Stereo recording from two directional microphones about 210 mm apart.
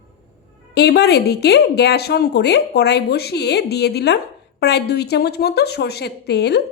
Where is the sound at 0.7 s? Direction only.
50° left (ahead or behind).